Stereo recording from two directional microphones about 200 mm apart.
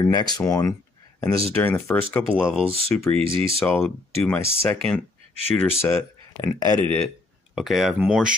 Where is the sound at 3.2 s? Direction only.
25° right (ahead or behind).